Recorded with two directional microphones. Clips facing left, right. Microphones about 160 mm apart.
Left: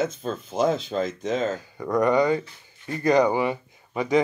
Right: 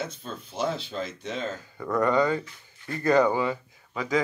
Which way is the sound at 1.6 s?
15° left (ahead or behind).